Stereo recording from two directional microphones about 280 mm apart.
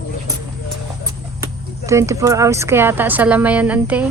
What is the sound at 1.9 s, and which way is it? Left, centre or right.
Speech, centre.